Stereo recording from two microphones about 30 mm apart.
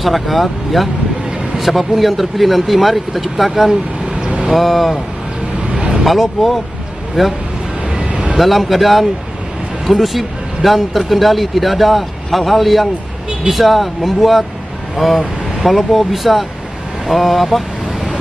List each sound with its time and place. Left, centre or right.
0.0 s speech: centre
5.7 s vehicle: right
6.0 s speech: centre
8.4 s speech: centre